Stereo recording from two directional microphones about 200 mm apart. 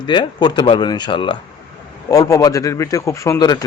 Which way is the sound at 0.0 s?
20° left (ahead or behind).